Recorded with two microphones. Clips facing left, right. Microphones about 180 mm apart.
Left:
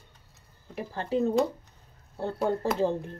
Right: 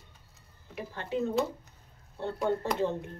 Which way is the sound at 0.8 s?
35° left (ahead or behind).